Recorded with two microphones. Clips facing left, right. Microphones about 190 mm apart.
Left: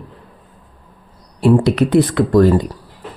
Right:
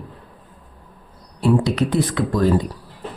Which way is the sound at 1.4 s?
65° left (ahead or behind).